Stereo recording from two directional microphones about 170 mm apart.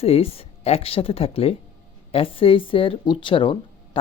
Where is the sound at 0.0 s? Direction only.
35° left (ahead or behind).